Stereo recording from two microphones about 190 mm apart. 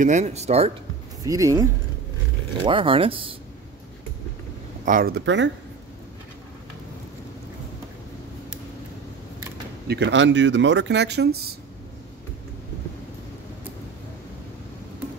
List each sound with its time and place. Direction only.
0.0 s speech: 40° right (ahead or behind)
1.2 s speech: 15° right (ahead or behind)
2.6 s speech: 25° right (ahead or behind)
4.8 s speech: 50° right (ahead or behind); by 5.5 s 70° right (ahead or behind)
9.8 s speech: 65° right (ahead or behind)